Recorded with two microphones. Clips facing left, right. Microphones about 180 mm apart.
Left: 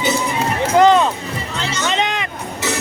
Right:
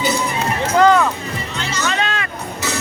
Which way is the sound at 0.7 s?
20° left (ahead or behind).